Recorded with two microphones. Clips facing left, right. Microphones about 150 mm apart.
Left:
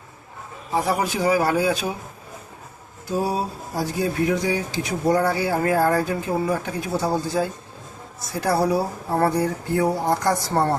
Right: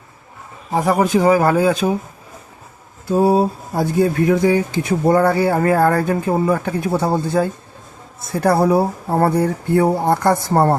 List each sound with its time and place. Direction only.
0.7 s a man's voice: 45° right (ahead or behind)
3.1 s speech: 55° right (ahead or behind)